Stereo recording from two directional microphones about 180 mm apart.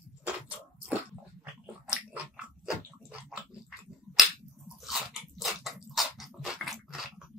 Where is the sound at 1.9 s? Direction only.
5° right (ahead or behind).